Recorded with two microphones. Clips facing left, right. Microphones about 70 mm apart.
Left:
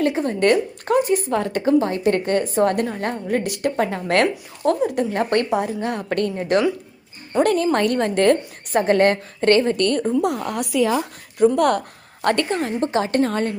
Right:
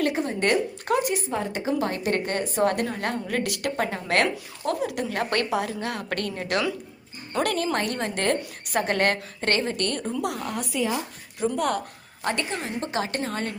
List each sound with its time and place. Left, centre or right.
0.2 s a woman's voice: left
1.7 s a woman's voice: left
2.0 s a woman's voice: left
2.8 s a woman's voice: left
3.8 s a woman's voice: left
10.0 s a woman's voice: left
10.2 s a woman's voice: left
10.6 s speech: left
11.5 s a woman's voice: left
12.5 s a woman's voice: left